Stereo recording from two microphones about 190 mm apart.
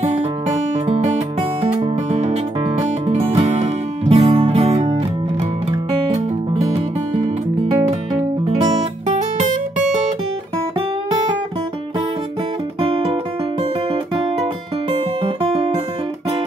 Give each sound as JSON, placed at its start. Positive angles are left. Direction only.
{"t": 0.8, "sound": "music", "side_deg": -35}
{"t": 9.0, "sound": "guitar", "side_deg": -40}
{"t": 12.8, "sound": "music", "side_deg": -30}
{"t": 14.1, "sound": "guitar", "side_deg": -30}